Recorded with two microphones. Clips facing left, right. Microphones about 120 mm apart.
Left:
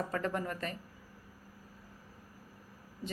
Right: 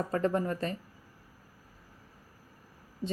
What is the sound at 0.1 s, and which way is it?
Speech, 30° right (ahead or behind).